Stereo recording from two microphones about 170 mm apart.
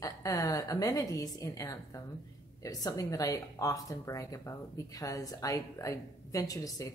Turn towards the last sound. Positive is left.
turn(degrees=20)  # may be behind; listen again after turning